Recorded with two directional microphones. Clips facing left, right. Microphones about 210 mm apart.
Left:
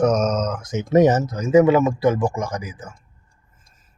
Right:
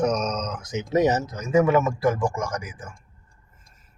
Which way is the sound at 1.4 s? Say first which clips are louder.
Left 5 dB; 20° left (ahead or behind).